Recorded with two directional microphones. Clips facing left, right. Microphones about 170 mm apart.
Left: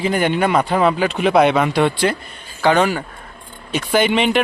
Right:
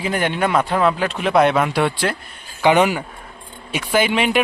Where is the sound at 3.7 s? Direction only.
5° right (ahead or behind).